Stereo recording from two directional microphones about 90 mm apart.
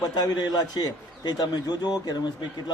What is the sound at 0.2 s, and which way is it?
A man's voice, 50° left (ahead or behind).